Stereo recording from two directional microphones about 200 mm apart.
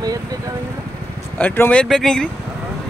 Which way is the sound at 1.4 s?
5° left (ahead or behind).